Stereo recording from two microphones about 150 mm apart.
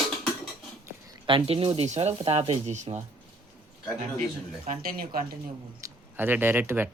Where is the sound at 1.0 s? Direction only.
35° right (ahead or behind); by 3.0 s 50° right (ahead or behind).